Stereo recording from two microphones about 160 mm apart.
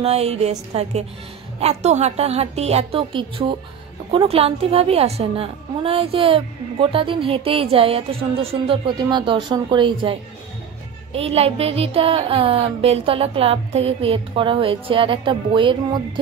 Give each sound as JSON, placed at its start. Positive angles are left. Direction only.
{"t": 0.0, "sound": "speech", "side_deg": -40}
{"t": 11.1, "sound": "speech", "side_deg": -40}